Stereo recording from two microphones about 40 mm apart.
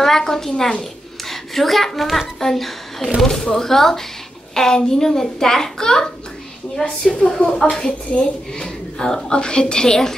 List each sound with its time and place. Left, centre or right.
0.0 s a woman's voice: centre